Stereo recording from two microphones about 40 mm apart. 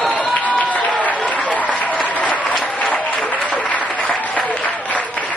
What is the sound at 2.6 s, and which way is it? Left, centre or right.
Applause, left.